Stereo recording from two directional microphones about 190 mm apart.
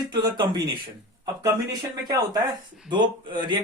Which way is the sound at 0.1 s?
20° right (ahead or behind).